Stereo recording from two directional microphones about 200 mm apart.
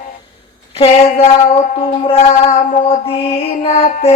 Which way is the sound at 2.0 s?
30° left (ahead or behind).